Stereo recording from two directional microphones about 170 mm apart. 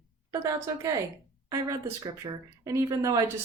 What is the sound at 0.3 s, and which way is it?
A woman's voice, 20° right (ahead or behind).